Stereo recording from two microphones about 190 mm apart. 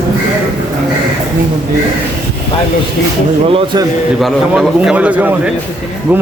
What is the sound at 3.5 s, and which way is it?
Speech, 30° right (ahead or behind).